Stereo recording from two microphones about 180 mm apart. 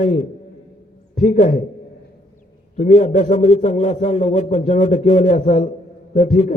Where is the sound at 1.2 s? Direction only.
45° left (ahead or behind).